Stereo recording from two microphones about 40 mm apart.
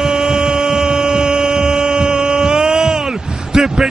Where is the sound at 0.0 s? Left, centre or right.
Centre.